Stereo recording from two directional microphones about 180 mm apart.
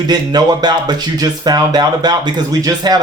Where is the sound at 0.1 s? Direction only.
20° right (ahead or behind).